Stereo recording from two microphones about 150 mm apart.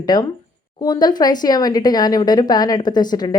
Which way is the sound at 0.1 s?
25° left (ahead or behind).